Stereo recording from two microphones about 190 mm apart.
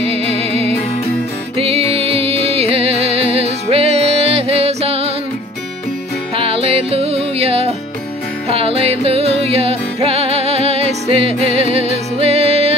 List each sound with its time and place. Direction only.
0.0 s music: 30° right (ahead or behind)
6.3 s music: 30° right (ahead or behind)